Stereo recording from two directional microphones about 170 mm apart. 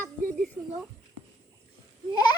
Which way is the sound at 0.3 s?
5° left (ahead or behind).